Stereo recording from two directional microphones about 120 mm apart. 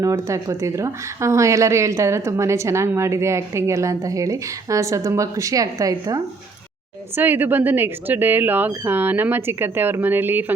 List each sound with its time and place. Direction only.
0.0 s speech: 25° right (ahead or behind)
7.2 s speech: 15° right (ahead or behind)